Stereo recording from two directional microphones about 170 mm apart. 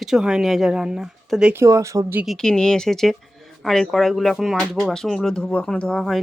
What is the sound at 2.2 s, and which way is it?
Speech, 5° left (ahead or behind).